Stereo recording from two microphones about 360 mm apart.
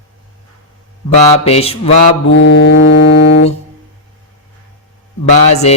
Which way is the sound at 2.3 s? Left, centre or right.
Left.